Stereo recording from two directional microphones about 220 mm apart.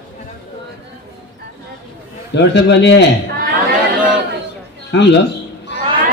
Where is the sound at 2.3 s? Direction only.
50° left (ahead or behind).